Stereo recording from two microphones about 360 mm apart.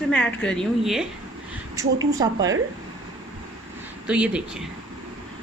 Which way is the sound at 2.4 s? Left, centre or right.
Right.